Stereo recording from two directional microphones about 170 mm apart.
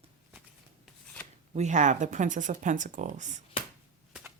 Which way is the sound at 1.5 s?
45° right (ahead or behind).